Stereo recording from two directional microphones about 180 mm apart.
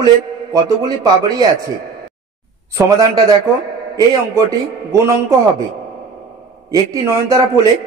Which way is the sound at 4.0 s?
20° right (ahead or behind).